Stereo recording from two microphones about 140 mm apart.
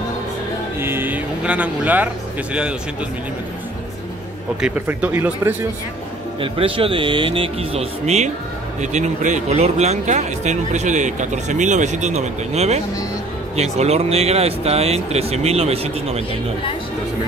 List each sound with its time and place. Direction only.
0.7 s speech: 15° right (ahead or behind)
4.6 s speech: 10° right (ahead or behind)
6.4 s speech: 40° right (ahead or behind)
8.9 s speech: 60° right (ahead or behind)